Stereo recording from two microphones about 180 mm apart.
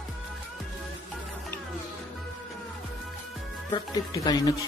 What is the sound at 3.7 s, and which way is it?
Speech, 20° left (ahead or behind).